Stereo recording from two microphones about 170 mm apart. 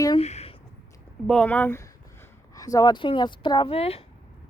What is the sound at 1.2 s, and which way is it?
A woman's voice, 5° left (ahead or behind).